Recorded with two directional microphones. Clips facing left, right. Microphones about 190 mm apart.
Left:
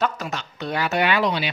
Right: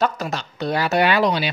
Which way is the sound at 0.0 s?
35° right (ahead or behind).